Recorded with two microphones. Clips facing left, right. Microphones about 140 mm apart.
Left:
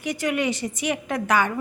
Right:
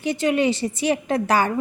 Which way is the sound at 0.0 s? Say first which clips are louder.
Right 4 dB; 30° right (ahead or behind).